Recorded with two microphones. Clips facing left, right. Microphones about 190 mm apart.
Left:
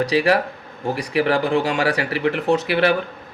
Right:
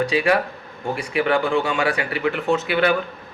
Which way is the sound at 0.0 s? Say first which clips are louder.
Left 1 dB; 35° left (ahead or behind).